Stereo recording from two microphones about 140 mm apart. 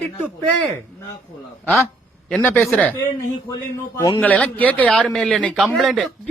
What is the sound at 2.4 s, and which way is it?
Speech, 10° left (ahead or behind).